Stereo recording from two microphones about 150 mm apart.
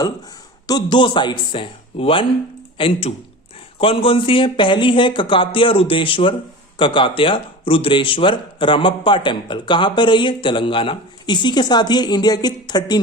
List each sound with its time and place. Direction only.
0.7 s speech: 30° left (ahead or behind)